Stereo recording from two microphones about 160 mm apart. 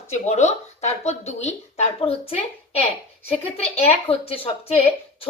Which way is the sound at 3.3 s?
40° left (ahead or behind).